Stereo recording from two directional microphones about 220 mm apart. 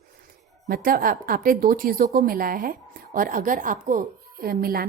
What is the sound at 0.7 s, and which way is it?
A woman's voice, 40° right (ahead or behind).